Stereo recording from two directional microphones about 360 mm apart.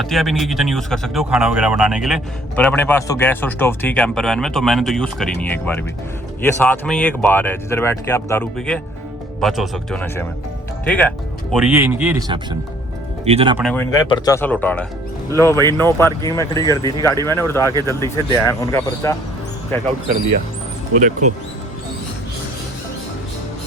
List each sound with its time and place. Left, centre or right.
0.0 s speech: centre
13.6 s speech: centre
20.9 s speech: right